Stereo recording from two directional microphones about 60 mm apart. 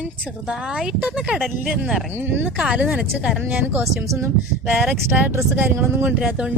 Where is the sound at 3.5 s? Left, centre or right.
Right.